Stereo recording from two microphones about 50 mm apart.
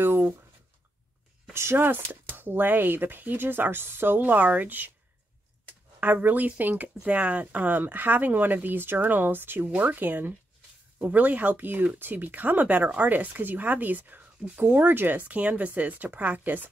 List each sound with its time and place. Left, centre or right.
1.5 s speech: right
1.9 s speech: right
4.2 s speech: right
5.9 s speech: right
9.7 s speech: right
11.0 s speech: right